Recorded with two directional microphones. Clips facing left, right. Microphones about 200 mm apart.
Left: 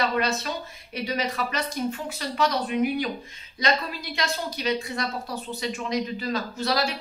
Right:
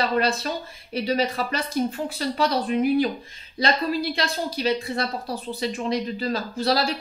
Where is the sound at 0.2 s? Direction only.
30° right (ahead or behind).